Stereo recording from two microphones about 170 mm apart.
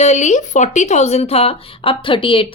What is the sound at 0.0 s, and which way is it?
A woman's voice, 40° left (ahead or behind).